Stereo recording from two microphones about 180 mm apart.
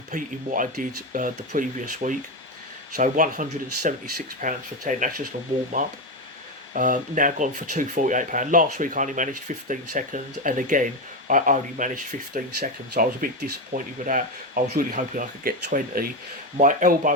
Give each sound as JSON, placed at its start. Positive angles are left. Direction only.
{"t": 0.1, "sound": "speech", "side_deg": -45}
{"t": 12.3, "sound": "speech", "side_deg": -60}